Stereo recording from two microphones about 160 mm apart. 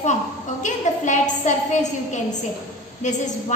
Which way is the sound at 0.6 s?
50° left (ahead or behind).